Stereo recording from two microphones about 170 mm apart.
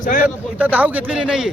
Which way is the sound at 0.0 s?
50° left (ahead or behind).